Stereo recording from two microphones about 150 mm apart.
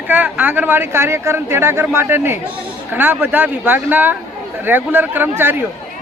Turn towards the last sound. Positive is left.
turn(degrees=-15)  # may be behind; listen again after turning